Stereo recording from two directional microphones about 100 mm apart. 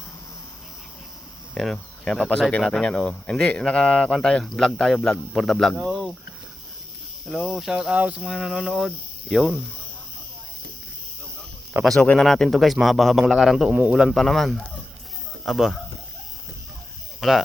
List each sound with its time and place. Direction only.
1.5 s speech: 5° left (ahead or behind)
7.4 s speech: 5° right (ahead or behind)
11.9 s speech: 10° left (ahead or behind)
17.2 s speech: centre (ahead or behind)